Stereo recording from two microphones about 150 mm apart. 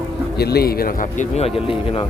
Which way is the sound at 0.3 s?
90° left.